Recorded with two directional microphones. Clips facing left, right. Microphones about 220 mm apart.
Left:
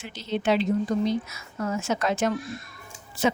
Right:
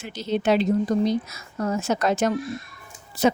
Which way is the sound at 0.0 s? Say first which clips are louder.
Right 3 dB; 40° right (ahead or behind).